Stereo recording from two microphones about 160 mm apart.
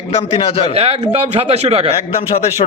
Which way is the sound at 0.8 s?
40° right (ahead or behind).